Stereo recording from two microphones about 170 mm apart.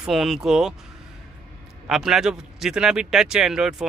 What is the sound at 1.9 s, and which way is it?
Speech, centre (ahead or behind).